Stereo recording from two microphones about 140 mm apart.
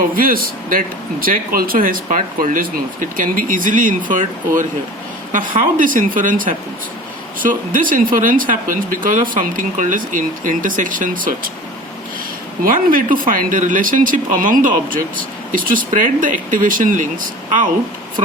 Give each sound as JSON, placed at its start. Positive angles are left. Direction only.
{"t": 0.1, "sound": "speech", "side_deg": -90}
{"t": 12.6, "sound": "speech", "side_deg": -80}